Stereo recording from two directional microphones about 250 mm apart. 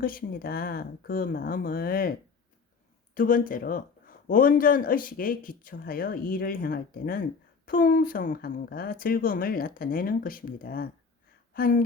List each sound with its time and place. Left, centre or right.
0.0 s speech: left
3.2 s speech: left